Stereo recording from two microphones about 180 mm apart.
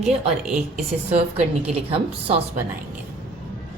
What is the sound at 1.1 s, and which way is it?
A woman's voice, 35° right (ahead or behind).